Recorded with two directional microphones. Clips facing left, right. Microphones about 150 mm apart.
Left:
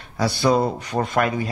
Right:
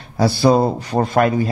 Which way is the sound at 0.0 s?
30° right (ahead or behind).